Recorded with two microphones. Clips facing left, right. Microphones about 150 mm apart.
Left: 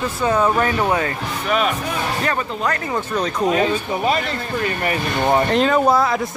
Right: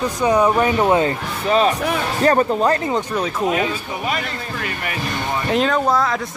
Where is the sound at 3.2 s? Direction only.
5° right (ahead or behind).